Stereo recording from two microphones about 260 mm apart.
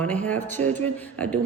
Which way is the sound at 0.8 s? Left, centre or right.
Centre.